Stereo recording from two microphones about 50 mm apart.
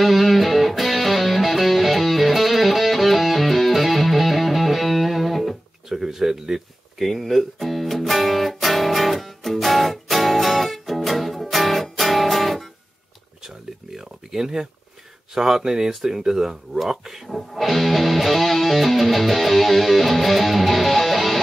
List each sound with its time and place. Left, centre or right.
0.0 s music: centre
13.9 s a sound: centre
15.3 s speech: centre